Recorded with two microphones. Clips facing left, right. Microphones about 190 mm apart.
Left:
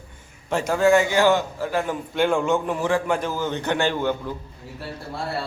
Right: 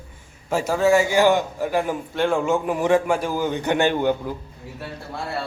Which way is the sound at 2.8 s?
20° right (ahead or behind).